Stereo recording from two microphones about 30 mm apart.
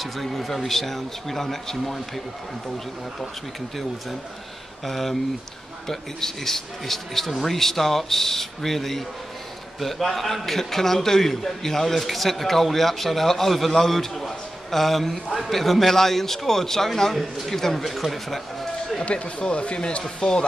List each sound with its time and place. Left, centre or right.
0.0 s a man's voice: centre
4.8 s a man's voice: centre
13.7 s a man's voice: centre
19.0 s speech: left